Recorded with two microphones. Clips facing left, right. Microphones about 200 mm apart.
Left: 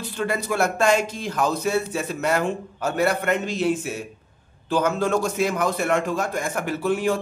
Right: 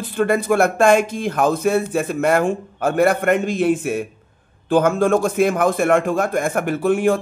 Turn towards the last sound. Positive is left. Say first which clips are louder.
# right 5 dB
turn(degrees=-50)  # may be behind; listen again after turning